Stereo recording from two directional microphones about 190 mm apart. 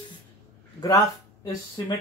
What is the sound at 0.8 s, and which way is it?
Speech, 20° left (ahead or behind).